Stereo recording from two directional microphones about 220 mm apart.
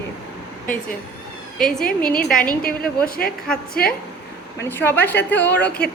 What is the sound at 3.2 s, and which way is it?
Speech, 45° left (ahead or behind).